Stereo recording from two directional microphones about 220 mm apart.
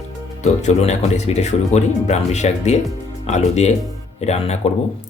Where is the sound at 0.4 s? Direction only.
30° left (ahead or behind).